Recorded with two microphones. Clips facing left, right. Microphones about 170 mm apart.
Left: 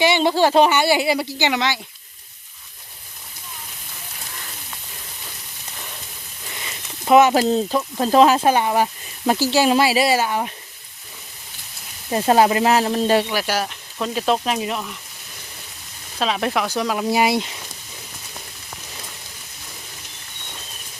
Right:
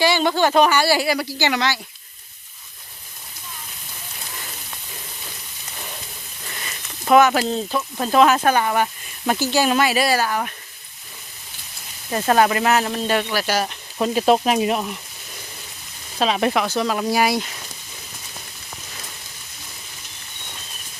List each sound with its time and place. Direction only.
0.0 s speech: 25° left (ahead or behind)
6.5 s a sound: 15° left (ahead or behind)
7.3 s speech: 40° left (ahead or behind)
7.9 s speech: 30° left (ahead or behind)
12.1 s speech: 25° left (ahead or behind)
13.2 s speech: 10° left (ahead or behind)
13.6 s speech: 10° right (ahead or behind)
16.2 s speech: 5° right (ahead or behind)
17.1 s speech: 25° left (ahead or behind)